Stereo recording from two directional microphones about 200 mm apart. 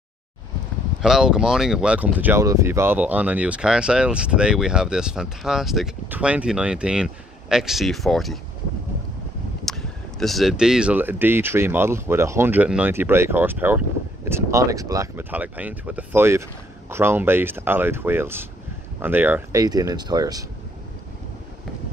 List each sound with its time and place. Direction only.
1.0 s speech: 5° right (ahead or behind)
9.7 s speech: centre (ahead or behind); by 20.4 s 20° right (ahead or behind)